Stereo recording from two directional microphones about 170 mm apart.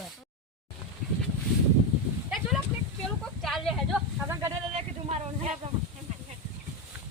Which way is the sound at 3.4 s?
Centre (ahead or behind).